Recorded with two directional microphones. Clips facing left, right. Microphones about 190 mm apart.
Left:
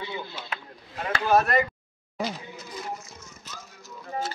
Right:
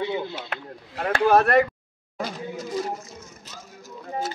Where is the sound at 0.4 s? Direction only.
60° right (ahead or behind).